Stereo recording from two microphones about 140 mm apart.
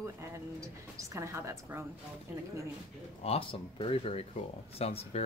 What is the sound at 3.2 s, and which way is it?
Speech, 45° left (ahead or behind).